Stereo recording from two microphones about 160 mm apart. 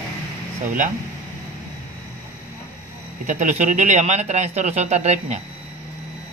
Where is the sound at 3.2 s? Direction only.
50° right (ahead or behind).